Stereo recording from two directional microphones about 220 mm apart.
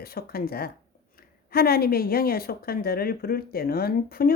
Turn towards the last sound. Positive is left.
turn(degrees=45)  # may be behind; listen again after turning